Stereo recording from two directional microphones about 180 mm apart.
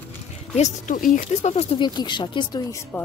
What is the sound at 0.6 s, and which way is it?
Speech, 45° left (ahead or behind).